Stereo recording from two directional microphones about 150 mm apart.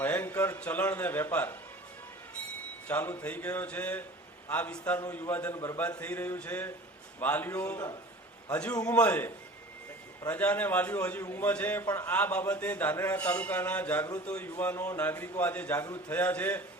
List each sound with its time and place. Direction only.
0.0 s a man's voice: 10° left (ahead or behind)
2.8 s a man's voice: 15° left (ahead or behind)